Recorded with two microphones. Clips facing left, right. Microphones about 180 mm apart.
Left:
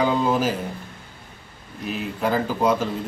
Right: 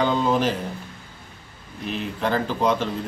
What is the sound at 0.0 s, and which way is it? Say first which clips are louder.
Speech: even; 5° left (ahead or behind).